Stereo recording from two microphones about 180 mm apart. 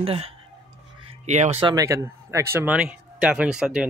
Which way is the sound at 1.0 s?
35° right (ahead or behind).